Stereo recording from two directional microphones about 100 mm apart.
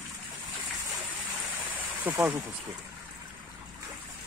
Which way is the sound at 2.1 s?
20° right (ahead or behind).